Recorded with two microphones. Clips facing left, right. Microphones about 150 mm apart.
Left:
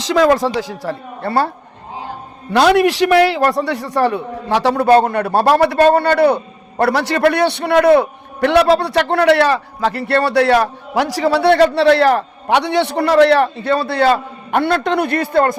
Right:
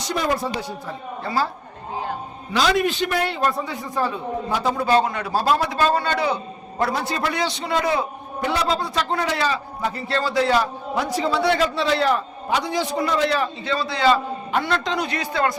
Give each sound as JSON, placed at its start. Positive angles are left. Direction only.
{"t": 0.1, "sound": "a woman's voice", "side_deg": 90}
{"t": 2.5, "sound": "a man's voice", "side_deg": 65}